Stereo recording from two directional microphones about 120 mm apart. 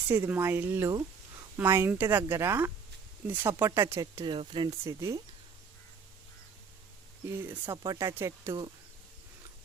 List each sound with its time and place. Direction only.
0.1 s speech: 15° right (ahead or behind)
4.3 s speech: 40° right (ahead or behind)
4.7 s speech: 25° right (ahead or behind)
7.3 s speech: 15° right (ahead or behind)